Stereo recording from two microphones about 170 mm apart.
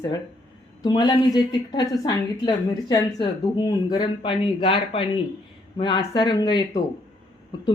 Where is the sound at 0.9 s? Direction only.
25° left (ahead or behind).